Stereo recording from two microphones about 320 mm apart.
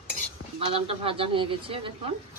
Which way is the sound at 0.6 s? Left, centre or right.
Centre.